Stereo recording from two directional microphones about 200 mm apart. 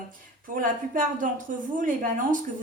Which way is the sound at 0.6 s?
45° right (ahead or behind).